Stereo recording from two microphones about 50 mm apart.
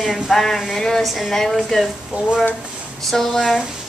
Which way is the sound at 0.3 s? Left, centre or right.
Centre.